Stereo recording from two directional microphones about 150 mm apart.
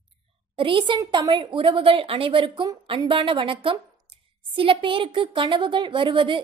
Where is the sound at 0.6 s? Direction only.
35° right (ahead or behind).